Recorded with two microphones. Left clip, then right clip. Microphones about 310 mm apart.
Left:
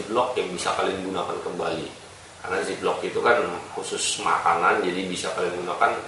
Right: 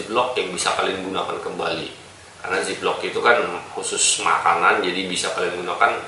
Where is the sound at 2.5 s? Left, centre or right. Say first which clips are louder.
Right 3 dB; centre.